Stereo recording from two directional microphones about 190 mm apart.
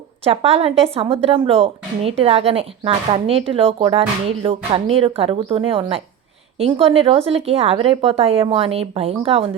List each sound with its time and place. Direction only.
0.3 s speech: 30° right (ahead or behind)